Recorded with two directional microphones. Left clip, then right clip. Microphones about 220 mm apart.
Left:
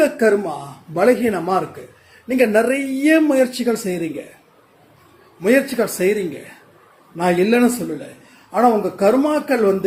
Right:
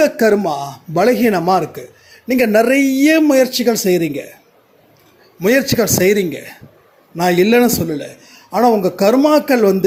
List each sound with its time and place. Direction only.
0.0 s speech: 40° right (ahead or behind)
5.4 s speech: 40° right (ahead or behind)